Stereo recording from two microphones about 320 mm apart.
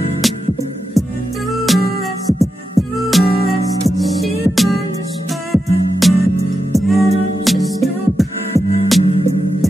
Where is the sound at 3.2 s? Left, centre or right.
Centre.